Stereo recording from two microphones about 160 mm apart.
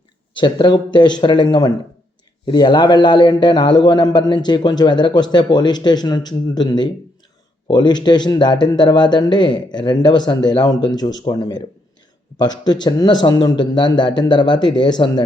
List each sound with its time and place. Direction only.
0.3 s a man's voice: 30° left (ahead or behind)